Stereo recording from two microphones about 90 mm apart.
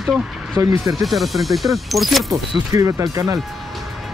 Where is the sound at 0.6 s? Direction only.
45° right (ahead or behind).